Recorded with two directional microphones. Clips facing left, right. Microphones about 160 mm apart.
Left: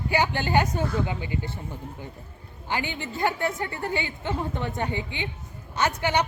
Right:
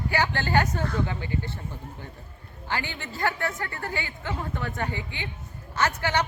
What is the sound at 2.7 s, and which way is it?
A woman's voice, 15° left (ahead or behind).